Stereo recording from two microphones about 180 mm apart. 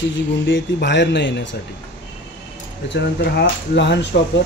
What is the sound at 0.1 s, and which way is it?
Speech, 90° left.